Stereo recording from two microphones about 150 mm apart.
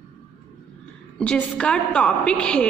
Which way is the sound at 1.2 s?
5° left (ahead or behind).